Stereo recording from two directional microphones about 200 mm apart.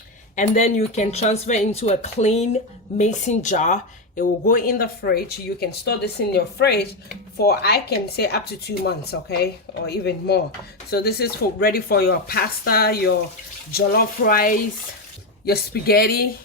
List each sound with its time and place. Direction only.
0.3 s speech: 35° left (ahead or behind)